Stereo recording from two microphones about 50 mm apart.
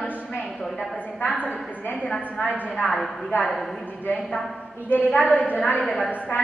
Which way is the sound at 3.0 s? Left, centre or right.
Centre.